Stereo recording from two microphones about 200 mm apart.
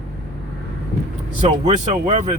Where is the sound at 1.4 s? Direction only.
35° right (ahead or behind).